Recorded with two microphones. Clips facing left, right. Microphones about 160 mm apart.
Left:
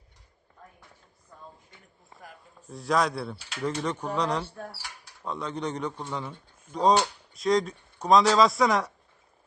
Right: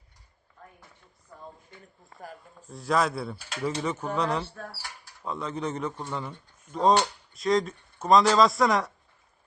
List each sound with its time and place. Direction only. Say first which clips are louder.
2.6 s a man's voice: even; centre (ahead or behind)